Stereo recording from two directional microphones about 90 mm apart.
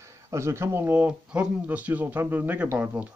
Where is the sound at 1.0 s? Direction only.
10° right (ahead or behind).